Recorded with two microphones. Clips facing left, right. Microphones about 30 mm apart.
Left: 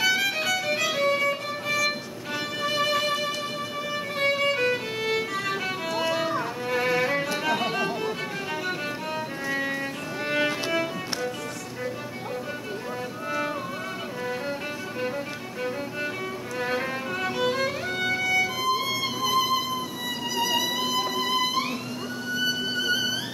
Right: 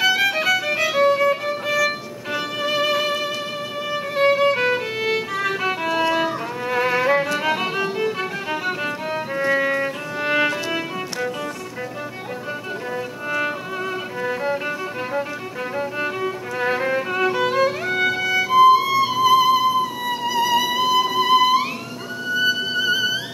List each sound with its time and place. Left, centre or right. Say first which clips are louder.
0.0 s violin: right 5 dB; centre
1.5 s music: right 5 dB; centre
9.5 s music: right 8 dB; right
14.2 s music: right 8 dB; centre
16.5 s violin: right 7 dB; centre
20.3 s music: right 6 dB; centre